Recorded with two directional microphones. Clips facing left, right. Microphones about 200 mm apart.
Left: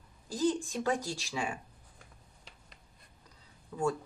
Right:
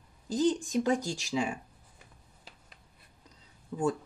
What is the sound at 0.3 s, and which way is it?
Speech, 20° right (ahead or behind).